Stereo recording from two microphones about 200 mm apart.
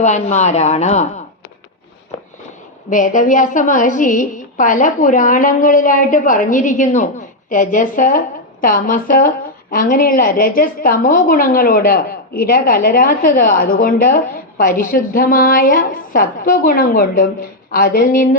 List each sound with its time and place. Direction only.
0.0 s a woman's voice: 35° left (ahead or behind)
2.9 s a woman's voice: 40° left (ahead or behind)